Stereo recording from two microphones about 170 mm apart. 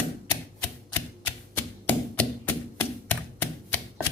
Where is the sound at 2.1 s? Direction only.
10° left (ahead or behind).